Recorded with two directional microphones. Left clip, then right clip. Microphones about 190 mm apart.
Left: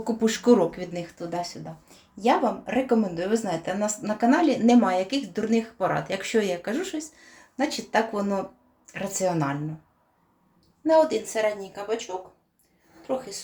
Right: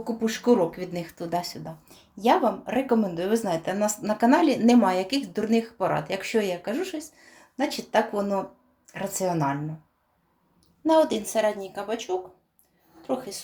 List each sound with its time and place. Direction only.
0.0 s speech: 15° left (ahead or behind)
0.9 s speech: 25° right (ahead or behind)
10.9 s a woman's voice: 40° right (ahead or behind)
13.0 s a woman's voice: 35° right (ahead or behind)